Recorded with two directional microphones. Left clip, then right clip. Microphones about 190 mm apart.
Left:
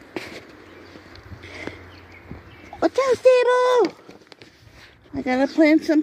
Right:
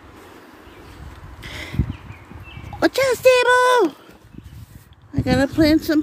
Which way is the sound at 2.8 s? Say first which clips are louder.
Right 2 dB; 30° right (ahead or behind).